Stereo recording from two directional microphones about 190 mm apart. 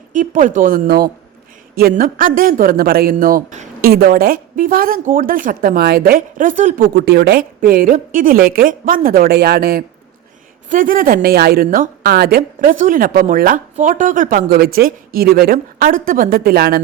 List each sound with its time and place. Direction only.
0.1 s a man's voice: 40° right (ahead or behind)